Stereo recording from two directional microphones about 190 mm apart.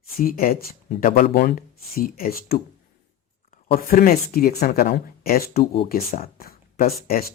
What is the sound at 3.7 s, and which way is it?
Speech, 50° left (ahead or behind).